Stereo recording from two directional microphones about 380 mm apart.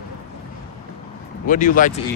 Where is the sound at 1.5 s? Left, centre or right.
Centre.